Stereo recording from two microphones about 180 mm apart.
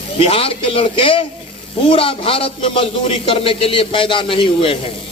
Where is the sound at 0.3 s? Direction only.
30° left (ahead or behind).